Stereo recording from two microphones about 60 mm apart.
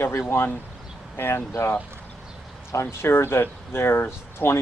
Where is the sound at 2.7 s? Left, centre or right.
Left.